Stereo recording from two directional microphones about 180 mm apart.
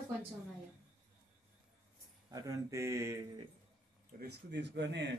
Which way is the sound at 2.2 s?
20° right (ahead or behind).